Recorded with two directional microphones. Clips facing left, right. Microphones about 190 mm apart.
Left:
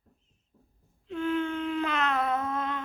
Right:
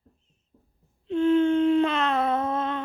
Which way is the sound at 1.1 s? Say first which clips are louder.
Right 9 dB; 25° right (ahead or behind).